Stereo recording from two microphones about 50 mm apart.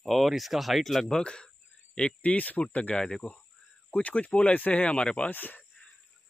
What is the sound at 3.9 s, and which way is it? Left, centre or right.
Speech, left.